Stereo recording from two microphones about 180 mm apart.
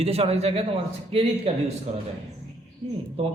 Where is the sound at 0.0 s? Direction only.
35° right (ahead or behind).